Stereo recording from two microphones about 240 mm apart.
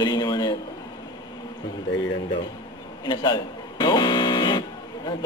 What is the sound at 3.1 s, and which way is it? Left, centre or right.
Speech, centre.